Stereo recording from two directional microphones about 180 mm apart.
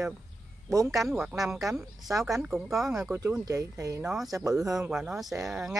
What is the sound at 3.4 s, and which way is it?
Speech, 20° right (ahead or behind).